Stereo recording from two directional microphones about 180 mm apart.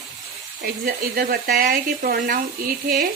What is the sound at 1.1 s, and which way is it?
Speech, 50° right (ahead or behind).